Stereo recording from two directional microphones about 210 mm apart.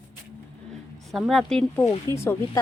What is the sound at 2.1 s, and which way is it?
Speech, 15° left (ahead or behind).